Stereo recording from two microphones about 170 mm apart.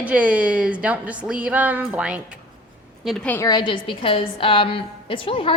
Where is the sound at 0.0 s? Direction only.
10° right (ahead or behind).